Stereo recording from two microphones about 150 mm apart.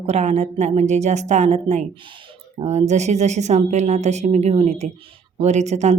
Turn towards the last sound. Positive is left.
turn(degrees=-50)  # may be behind; listen again after turning